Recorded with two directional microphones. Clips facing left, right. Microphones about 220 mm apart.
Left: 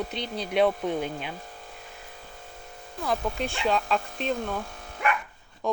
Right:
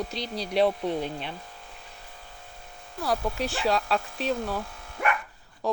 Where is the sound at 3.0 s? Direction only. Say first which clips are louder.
Right 1 dB; 5° right (ahead or behind).